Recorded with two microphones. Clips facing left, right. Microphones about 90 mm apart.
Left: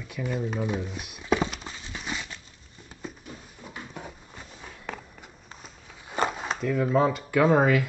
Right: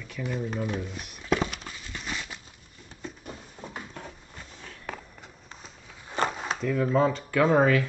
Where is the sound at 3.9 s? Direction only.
15° left (ahead or behind).